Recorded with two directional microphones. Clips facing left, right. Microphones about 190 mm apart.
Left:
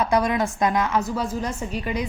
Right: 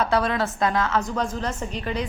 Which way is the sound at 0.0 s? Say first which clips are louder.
Left 1 dB; 15° left (ahead or behind).